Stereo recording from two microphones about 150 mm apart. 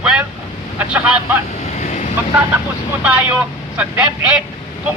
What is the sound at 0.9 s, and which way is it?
Speech, 10° right (ahead or behind).